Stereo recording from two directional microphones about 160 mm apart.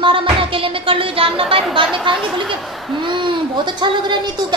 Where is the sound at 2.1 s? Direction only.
Centre (ahead or behind).